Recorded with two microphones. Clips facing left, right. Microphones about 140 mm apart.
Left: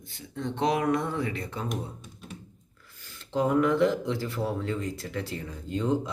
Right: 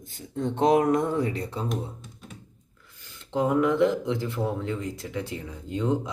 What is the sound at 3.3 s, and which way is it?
Speech, 20° right (ahead or behind).